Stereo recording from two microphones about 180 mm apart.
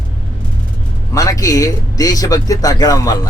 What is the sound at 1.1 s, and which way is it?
Speech, 20° left (ahead or behind).